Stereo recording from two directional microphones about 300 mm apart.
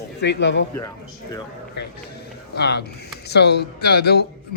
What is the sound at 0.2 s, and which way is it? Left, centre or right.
Speech, left.